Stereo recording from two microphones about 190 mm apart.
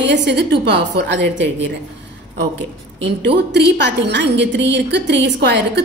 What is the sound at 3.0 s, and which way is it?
A woman's voice, 65° right (ahead or behind).